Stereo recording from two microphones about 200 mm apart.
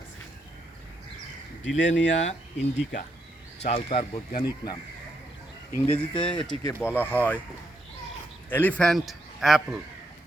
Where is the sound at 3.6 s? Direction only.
30° left (ahead or behind).